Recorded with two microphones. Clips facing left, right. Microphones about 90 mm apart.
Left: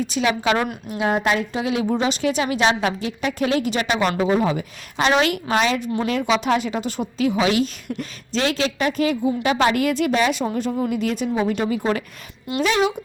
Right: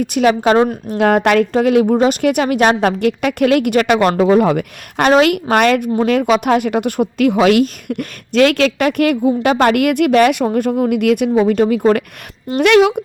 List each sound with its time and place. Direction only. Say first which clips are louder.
0.0 s speech: right 8 dB; 55° right (ahead or behind)
0.9 s speech: right 8 dB; 60° right (ahead or behind)
11.7 s a woman's voice: right 9 dB; 50° right (ahead or behind)
12.5 s speech: right 9 dB; 65° right (ahead or behind)